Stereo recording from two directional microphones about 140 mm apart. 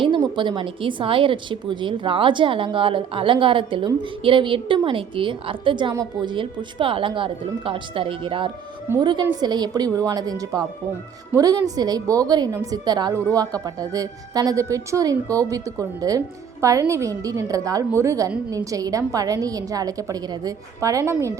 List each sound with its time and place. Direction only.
0.0 s a woman's voice: 35° right (ahead or behind)